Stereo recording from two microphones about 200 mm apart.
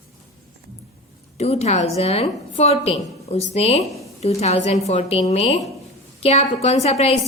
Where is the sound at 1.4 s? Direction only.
30° left (ahead or behind).